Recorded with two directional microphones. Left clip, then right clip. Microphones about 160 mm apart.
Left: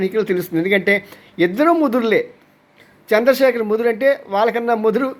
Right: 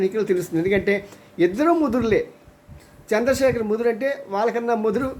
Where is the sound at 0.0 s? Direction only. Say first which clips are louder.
Left 2 dB; 25° left (ahead or behind).